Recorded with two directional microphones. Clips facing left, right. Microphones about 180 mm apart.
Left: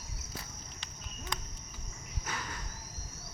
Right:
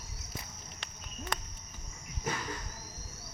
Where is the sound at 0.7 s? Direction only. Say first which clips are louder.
Right 2 dB; 60° right (ahead or behind).